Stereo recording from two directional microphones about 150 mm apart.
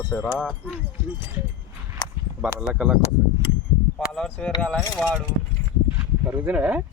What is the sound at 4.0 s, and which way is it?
Speech, centre (ahead or behind).